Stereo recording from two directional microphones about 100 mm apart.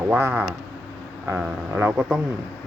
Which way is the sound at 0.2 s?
20° right (ahead or behind).